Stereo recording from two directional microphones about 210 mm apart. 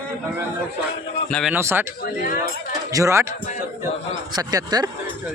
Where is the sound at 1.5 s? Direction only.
10° right (ahead or behind).